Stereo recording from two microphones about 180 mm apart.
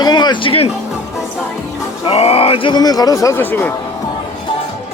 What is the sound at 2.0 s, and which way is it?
Speech, 35° left (ahead or behind).